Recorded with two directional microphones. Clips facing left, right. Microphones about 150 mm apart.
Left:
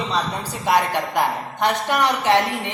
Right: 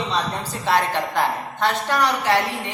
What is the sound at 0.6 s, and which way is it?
A woman's voice, 15° left (ahead or behind).